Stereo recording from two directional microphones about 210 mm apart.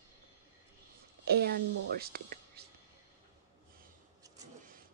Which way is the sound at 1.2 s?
50° right (ahead or behind).